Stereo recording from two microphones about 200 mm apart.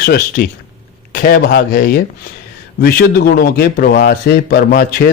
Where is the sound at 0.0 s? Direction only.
50° left (ahead or behind).